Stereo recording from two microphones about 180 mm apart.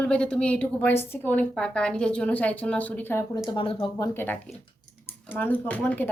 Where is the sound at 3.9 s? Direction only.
15° left (ahead or behind).